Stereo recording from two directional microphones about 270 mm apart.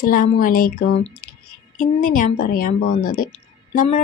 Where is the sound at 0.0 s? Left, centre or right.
Left.